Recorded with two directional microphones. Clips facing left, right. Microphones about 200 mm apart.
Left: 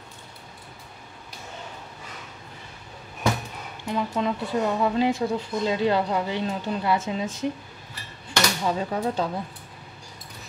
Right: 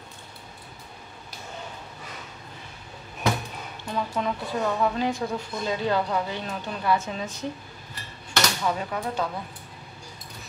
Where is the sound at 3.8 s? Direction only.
20° left (ahead or behind).